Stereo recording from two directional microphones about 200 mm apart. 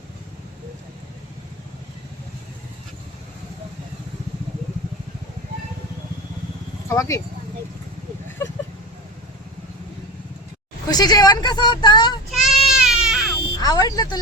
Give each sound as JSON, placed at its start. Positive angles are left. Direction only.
{"t": 6.8, "sound": "speech", "side_deg": 15}
{"t": 10.8, "sound": "speech", "side_deg": 20}
{"t": 12.3, "sound": "goat", "side_deg": 0}
{"t": 13.6, "sound": "speech", "side_deg": 20}